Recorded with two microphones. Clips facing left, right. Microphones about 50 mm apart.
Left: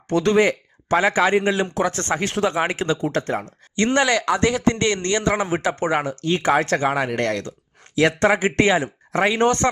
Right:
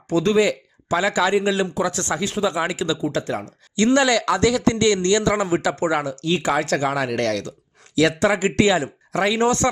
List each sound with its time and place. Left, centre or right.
0.1 s speech: left
8.2 s speech: left